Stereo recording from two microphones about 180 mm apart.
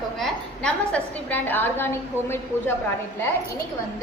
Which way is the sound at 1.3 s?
10° left (ahead or behind).